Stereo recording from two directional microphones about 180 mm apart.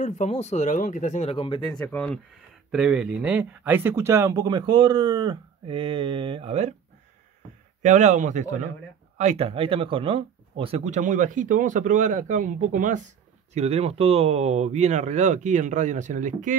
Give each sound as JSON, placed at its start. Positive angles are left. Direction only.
{"t": 0.0, "sound": "speech", "side_deg": 40}
{"t": 1.7, "sound": "speech", "side_deg": 5}
{"t": 7.8, "sound": "speech", "side_deg": -40}